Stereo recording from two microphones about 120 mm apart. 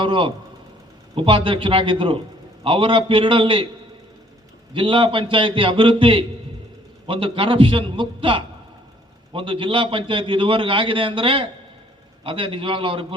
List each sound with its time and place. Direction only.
0.0 s a man's voice: 45° right (ahead or behind)
4.7 s a man's voice: 45° right (ahead or behind)